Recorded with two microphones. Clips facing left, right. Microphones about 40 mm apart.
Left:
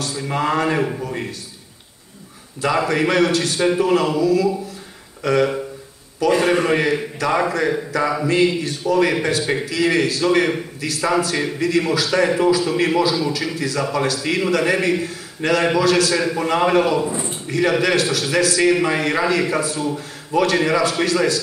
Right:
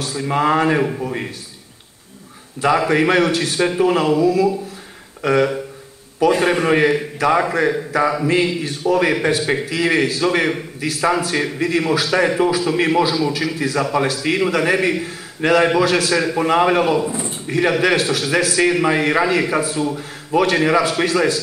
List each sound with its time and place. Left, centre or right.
0.1 s speech: centre
2.6 s a man's voice: right